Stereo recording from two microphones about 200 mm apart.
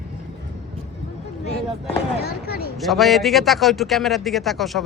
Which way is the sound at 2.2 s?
50° left (ahead or behind).